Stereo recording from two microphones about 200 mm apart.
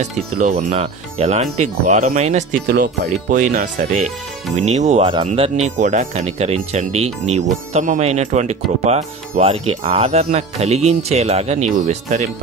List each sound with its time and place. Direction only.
0.0 s speech: 35° right (ahead or behind)